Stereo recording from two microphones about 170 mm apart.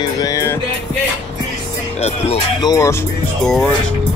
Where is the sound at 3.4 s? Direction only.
5° left (ahead or behind).